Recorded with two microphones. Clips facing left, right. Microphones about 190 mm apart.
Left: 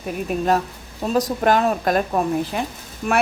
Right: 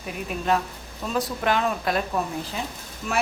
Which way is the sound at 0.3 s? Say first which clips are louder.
Left 4 dB; 45° left (ahead or behind).